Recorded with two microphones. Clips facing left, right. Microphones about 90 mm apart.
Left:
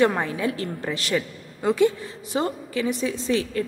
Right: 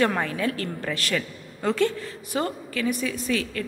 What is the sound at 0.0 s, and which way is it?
A woman's voice, 20° left (ahead or behind).